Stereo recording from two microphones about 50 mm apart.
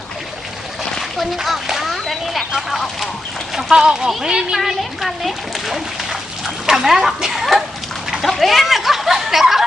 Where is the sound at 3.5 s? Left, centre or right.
Centre.